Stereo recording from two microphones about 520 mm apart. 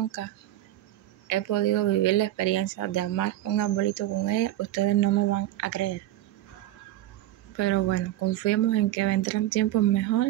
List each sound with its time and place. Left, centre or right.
0.2 s speech: left
7.5 s speech: left